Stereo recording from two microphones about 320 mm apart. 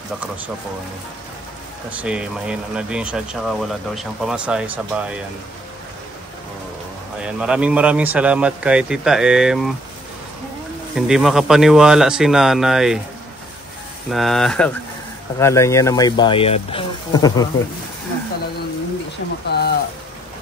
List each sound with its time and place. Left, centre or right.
1.9 s speech: centre
7.2 s speech: centre
11.0 s speech: centre
14.1 s speech: centre
19.4 s a sound: left